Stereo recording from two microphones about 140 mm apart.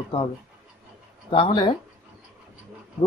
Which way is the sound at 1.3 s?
35° left (ahead or behind).